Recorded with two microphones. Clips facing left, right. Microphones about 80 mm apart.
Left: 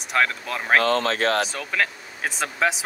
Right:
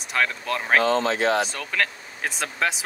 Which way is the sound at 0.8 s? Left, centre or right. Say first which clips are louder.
Even; left.